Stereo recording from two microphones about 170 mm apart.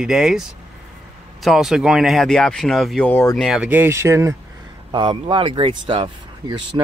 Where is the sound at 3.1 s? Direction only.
10° left (ahead or behind).